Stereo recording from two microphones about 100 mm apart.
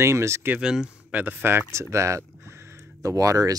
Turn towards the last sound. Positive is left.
turn(degrees=-35)  # may be behind; listen again after turning